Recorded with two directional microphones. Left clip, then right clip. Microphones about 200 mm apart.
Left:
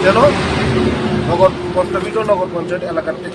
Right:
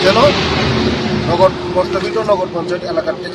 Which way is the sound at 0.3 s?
30° left (ahead or behind).